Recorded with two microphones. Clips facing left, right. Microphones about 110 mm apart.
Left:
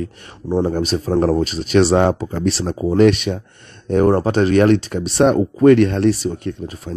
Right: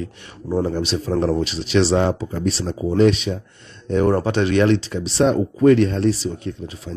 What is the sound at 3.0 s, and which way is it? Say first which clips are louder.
Speech: left 3 dB; 60° left (ahead or behind).